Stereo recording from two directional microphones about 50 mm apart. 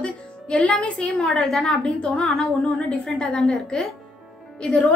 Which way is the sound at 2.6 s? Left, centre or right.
Centre.